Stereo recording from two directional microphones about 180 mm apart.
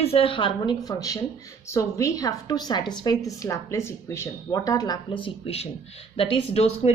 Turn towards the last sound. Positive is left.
turn(degrees=35)  # may be behind; listen again after turning